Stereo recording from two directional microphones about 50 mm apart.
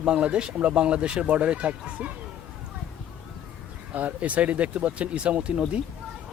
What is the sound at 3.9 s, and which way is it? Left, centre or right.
Speech, right.